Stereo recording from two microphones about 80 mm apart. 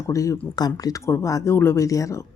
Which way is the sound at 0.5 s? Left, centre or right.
Left.